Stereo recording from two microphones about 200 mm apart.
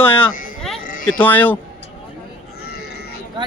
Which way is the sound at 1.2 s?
10° left (ahead or behind).